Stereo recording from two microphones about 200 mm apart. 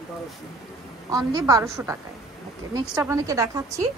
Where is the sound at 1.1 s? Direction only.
15° right (ahead or behind).